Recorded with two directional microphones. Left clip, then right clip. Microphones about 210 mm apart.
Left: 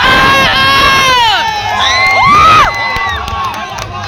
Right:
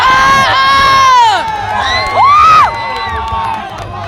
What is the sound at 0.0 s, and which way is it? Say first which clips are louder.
Crowd: even; 20° right (ahead or behind).